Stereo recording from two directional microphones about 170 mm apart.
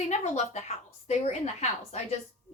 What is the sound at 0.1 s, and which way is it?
A woman's voice, 40° left (ahead or behind).